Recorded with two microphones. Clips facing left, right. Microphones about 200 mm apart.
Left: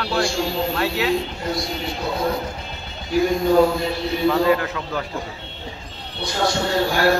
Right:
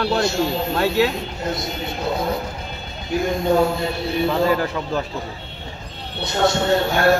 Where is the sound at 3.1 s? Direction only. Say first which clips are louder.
Left 3 dB; 25° right (ahead or behind).